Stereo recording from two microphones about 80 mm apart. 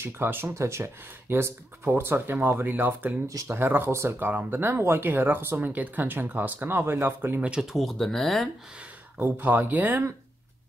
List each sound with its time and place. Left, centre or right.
0.0 s speech: right
4.3 s speech: right
7.4 s speech: centre
7.7 s speech: centre
9.2 s speech: right